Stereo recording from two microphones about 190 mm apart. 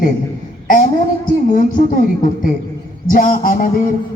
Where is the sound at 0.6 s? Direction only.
45° left (ahead or behind).